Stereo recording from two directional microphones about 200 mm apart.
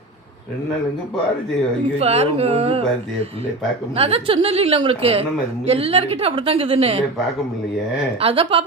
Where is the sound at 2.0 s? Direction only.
30° right (ahead or behind).